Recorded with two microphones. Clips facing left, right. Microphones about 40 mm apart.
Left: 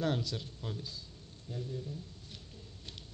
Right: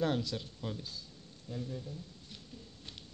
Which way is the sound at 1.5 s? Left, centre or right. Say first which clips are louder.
Even; centre.